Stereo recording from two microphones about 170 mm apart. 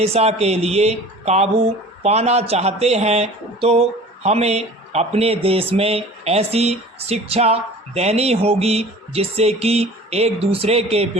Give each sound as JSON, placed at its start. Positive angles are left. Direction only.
{"t": 0.0, "sound": "speech", "side_deg": -40}